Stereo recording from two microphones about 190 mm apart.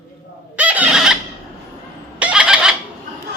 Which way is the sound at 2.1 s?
5° right (ahead or behind).